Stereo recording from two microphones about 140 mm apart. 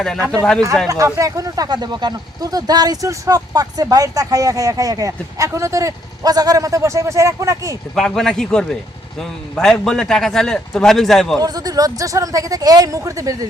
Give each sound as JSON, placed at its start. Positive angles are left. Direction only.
{"t": 0.3, "sound": "a man's voice", "side_deg": 5}
{"t": 0.9, "sound": "speech", "side_deg": -25}
{"t": 7.9, "sound": "a man's voice", "side_deg": 5}
{"t": 11.3, "sound": "speech", "side_deg": -25}